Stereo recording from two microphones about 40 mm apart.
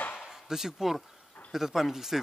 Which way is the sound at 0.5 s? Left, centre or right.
Centre.